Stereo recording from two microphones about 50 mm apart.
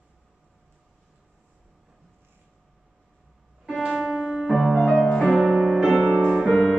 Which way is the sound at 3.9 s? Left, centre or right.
Centre.